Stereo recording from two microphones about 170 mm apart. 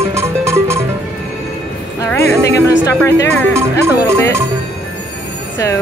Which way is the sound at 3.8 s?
15° right (ahead or behind).